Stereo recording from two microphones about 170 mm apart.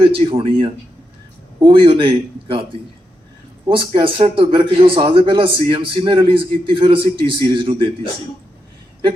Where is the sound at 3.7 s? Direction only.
30° right (ahead or behind).